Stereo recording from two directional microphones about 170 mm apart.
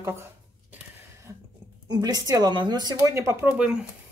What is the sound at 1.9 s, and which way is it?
A woman's voice, 25° right (ahead or behind).